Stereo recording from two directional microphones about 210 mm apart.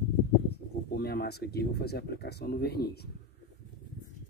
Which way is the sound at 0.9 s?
50° left (ahead or behind).